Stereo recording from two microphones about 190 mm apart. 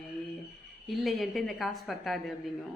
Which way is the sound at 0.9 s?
Centre (ahead or behind).